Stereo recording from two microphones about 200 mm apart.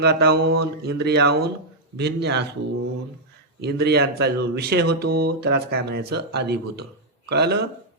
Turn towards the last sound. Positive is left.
turn(degrees=-55)  # may be behind; listen again after turning